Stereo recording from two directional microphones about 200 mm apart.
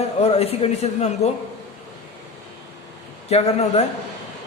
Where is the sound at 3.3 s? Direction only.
30° left (ahead or behind).